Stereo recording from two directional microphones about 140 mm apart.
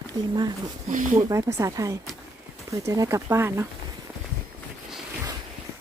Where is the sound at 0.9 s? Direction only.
70° right (ahead or behind).